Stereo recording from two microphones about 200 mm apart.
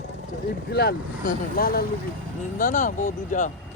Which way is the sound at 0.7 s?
55° left (ahead or behind).